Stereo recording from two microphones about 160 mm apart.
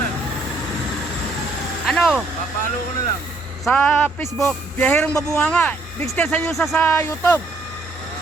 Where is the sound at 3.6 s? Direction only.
5° left (ahead or behind).